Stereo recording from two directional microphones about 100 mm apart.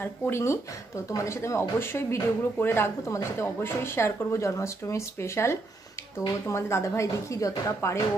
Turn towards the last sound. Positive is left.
turn(degrees=30)  # may be behind; listen again after turning